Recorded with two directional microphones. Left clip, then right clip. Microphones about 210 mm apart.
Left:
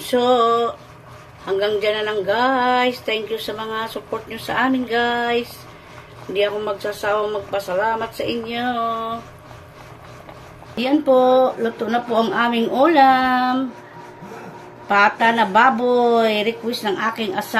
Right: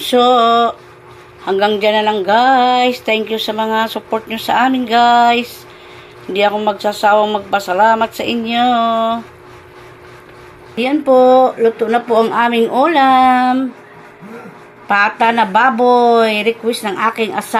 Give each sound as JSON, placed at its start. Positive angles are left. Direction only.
{"t": 0.1, "sound": "a sound", "side_deg": -35}
{"t": 10.8, "sound": "speech", "side_deg": -20}
{"t": 14.9, "sound": "a woman's voice", "side_deg": -25}